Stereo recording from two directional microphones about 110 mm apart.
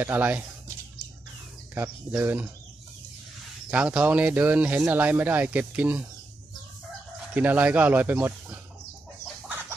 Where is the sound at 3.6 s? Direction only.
15° right (ahead or behind).